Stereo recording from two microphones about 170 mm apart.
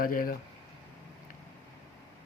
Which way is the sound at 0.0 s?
55° left (ahead or behind).